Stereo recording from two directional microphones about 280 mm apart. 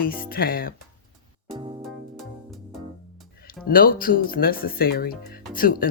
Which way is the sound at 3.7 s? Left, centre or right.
Left.